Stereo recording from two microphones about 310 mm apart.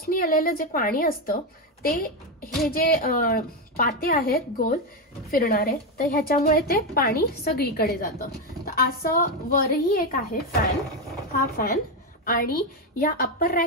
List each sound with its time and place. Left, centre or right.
0.0 s a woman's voice: left